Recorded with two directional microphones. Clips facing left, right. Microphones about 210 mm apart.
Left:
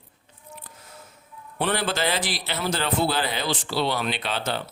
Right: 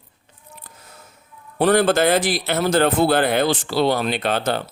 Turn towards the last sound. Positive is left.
turn(degrees=-50)  # may be behind; listen again after turning